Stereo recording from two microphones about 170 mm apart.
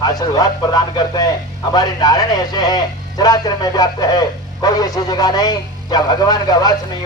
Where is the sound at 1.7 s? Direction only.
25° left (ahead or behind).